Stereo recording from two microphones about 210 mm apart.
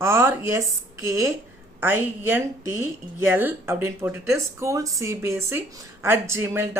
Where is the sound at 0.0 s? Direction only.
10° right (ahead or behind).